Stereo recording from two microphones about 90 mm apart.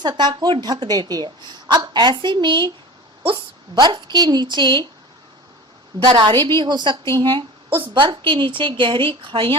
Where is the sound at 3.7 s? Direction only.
55° right (ahead or behind).